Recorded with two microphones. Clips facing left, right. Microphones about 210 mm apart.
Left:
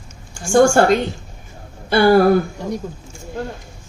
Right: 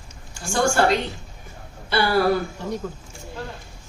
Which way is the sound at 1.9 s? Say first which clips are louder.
Left 8 dB; 50° left (ahead or behind).